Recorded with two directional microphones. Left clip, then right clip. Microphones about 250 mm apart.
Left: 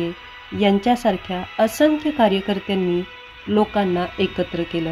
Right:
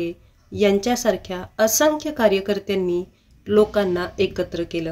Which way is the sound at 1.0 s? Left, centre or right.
Left.